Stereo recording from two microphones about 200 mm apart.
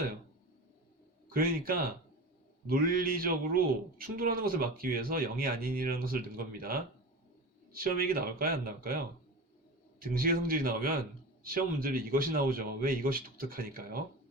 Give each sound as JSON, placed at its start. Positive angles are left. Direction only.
{"t": 1.3, "sound": "a man's voice", "side_deg": -45}
{"t": 10.0, "sound": "a man's voice", "side_deg": -45}